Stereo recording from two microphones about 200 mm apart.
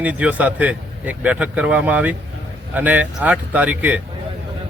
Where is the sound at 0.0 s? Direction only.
5° right (ahead or behind).